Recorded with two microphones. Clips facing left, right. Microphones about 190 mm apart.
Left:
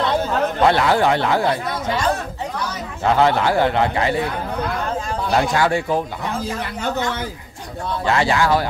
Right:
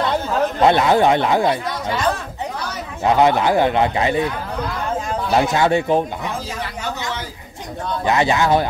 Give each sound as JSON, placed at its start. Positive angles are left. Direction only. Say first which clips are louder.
{"t": 0.6, "sound": "a man's voice", "louder": "right 2 dB", "side_deg": -20}
{"t": 3.0, "sound": "a man's voice", "louder": "right 1 dB", "side_deg": -20}
{"t": 5.3, "sound": "a man's voice", "louder": "right 2 dB", "side_deg": -20}
{"t": 8.0, "sound": "a man's voice", "louder": "right 1 dB", "side_deg": -20}